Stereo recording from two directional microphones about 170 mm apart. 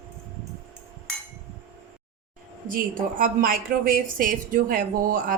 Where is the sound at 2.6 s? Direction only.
55° right (ahead or behind).